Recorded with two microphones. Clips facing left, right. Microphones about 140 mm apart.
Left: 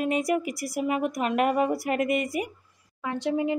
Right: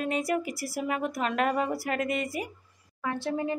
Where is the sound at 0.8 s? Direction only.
10° left (ahead or behind).